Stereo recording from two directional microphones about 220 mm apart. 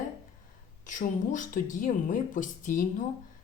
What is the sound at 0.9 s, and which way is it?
Speech, 35° left (ahead or behind).